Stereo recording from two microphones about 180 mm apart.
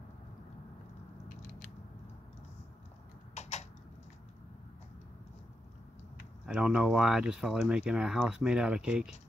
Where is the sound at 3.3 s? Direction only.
40° left (ahead or behind).